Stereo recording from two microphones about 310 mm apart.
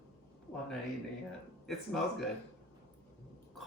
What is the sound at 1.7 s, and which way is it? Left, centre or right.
Speech, centre.